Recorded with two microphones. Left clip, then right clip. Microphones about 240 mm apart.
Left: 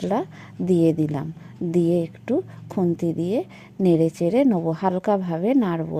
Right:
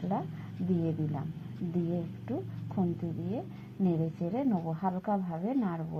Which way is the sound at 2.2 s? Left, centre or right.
Left.